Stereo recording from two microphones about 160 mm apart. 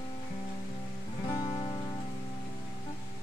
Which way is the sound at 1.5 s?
35° left (ahead or behind).